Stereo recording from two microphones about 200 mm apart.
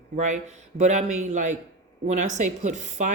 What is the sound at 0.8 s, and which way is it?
Speech, 35° right (ahead or behind).